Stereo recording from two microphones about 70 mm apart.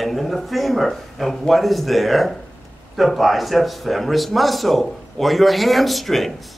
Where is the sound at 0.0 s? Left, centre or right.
Centre.